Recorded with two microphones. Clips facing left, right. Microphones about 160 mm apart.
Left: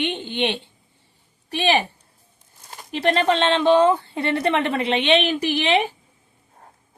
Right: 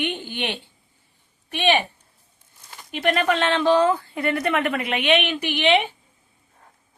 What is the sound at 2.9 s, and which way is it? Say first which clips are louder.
Speech: left 2 dB; 30° left (ahead or behind).